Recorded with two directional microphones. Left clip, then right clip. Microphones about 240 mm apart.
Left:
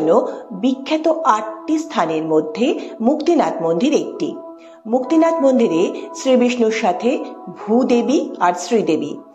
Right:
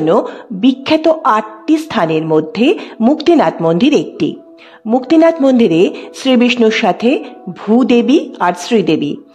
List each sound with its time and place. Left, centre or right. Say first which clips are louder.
0.0 s speech: right 3 dB; right